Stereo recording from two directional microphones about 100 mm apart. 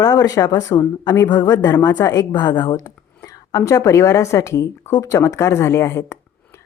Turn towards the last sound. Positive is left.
turn(degrees=30)  # may be behind; listen again after turning